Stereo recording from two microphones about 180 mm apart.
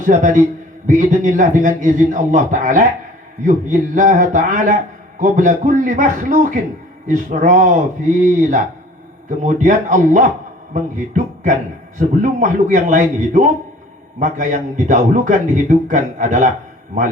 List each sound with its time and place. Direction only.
0.0 s a man's voice: 45° right (ahead or behind)